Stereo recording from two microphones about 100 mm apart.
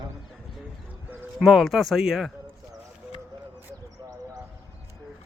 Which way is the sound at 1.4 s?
Centre (ahead or behind).